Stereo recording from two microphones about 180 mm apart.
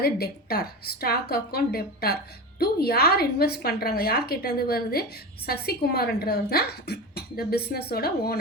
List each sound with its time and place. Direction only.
0.0 s speech: 60° left (ahead or behind)